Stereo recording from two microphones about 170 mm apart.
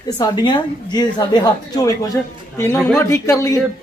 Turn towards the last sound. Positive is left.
turn(degrees=20)  # may be behind; listen again after turning